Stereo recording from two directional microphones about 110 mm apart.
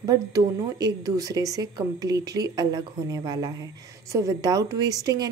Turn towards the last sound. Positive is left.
turn(degrees=-35)  # may be behind; listen again after turning